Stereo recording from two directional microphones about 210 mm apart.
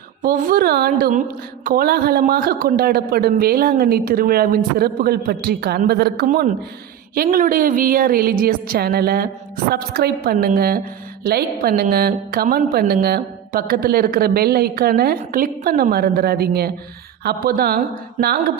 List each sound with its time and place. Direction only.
0.2 s a woman's voice: 40° right (ahead or behind)